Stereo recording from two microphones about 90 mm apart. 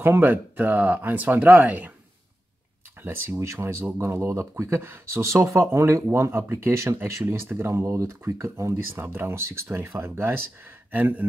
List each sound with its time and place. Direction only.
0.0 s speech: 25° right (ahead or behind)
3.0 s speech: 25° right (ahead or behind)